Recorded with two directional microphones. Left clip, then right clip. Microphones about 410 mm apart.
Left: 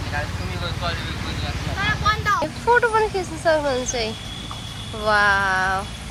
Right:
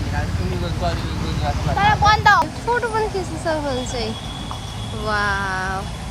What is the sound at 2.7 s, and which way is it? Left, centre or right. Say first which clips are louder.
Speech: left 3 dB; centre.